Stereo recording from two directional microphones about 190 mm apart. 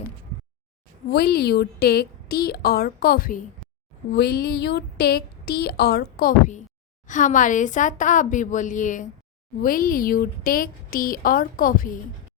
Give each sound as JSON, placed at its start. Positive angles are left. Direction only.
{"t": 1.1, "sound": "a woman's voice", "side_deg": 55}